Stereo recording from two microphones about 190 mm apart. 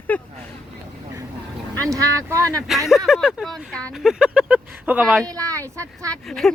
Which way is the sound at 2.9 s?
Centre (ahead or behind).